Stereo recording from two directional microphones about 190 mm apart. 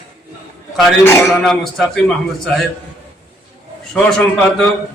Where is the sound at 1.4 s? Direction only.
5° left (ahead or behind).